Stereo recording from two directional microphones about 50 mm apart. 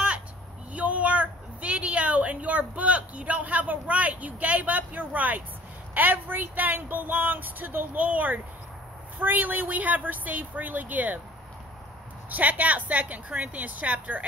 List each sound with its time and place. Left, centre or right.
0.7 s a woman's voice: right
12.3 s speech: right